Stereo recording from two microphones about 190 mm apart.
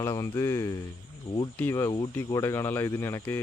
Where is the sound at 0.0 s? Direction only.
15° left (ahead or behind).